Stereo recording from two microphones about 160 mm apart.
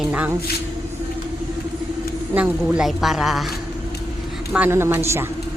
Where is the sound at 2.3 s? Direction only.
10° right (ahead or behind).